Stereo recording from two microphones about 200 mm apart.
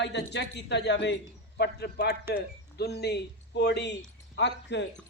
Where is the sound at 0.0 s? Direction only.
60° left (ahead or behind).